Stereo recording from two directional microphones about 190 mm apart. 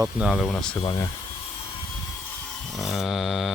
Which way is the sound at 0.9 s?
25° left (ahead or behind).